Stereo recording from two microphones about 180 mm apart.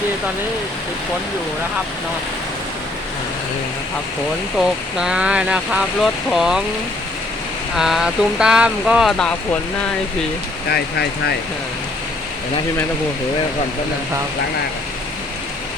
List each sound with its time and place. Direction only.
4.5 s speech: 5° right (ahead or behind)
7.8 s speech: centre (ahead or behind)
10.7 s speech: 65° left (ahead or behind)